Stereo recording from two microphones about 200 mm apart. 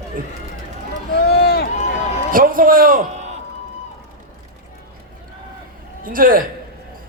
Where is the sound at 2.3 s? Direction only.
45° right (ahead or behind).